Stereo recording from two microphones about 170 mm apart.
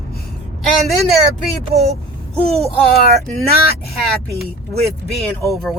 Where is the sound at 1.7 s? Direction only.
40° right (ahead or behind).